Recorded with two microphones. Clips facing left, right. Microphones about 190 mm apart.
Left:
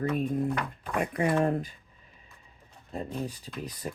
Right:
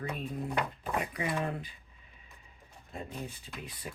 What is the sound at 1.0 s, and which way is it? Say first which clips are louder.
Speech: left 8 dB; 50° left (ahead or behind).